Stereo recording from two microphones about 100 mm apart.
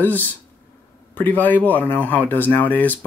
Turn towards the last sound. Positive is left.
turn(degrees=15)  # may be behind; listen again after turning